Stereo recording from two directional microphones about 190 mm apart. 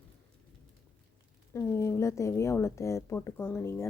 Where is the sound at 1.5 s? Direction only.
15° left (ahead or behind).